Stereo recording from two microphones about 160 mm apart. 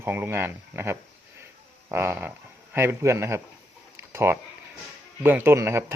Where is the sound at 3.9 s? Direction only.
15° right (ahead or behind).